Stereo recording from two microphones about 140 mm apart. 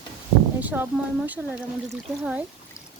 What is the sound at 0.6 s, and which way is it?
Speech, 10° right (ahead or behind).